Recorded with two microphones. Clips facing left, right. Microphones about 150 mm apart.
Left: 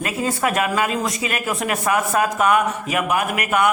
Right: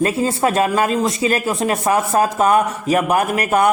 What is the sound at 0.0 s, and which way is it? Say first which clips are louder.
Speech: right 5 dB; 30° right (ahead or behind).